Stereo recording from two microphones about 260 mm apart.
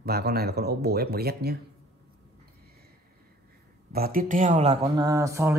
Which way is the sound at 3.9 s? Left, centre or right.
Right.